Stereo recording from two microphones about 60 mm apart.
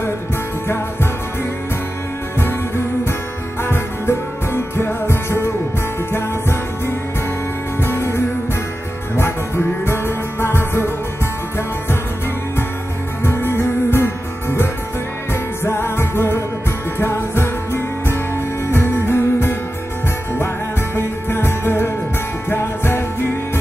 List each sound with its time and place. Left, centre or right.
3.6 s music: left
7.8 s music: left
9.8 s music: left
13.2 s music: left
20.9 s music: left